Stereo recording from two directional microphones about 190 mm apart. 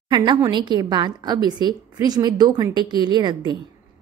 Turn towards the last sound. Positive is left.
turn(degrees=-20)  # may be behind; listen again after turning